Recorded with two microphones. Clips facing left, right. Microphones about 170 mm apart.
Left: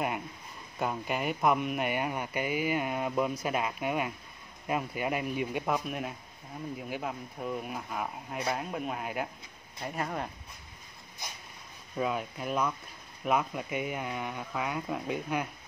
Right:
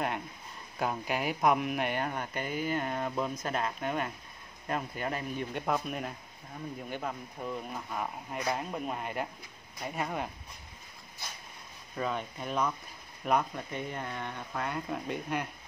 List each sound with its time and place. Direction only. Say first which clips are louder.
0.7 s speech: even; centre (ahead or behind)
11.2 s speech: left 1 dB; 15° left (ahead or behind)
12.0 s speech: left 2 dB; 5° left (ahead or behind)